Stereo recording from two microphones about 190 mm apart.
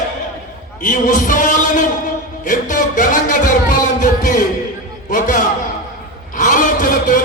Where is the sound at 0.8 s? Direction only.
45° left (ahead or behind).